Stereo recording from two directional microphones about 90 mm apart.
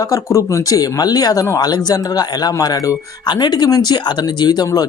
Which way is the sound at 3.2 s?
55° left (ahead or behind).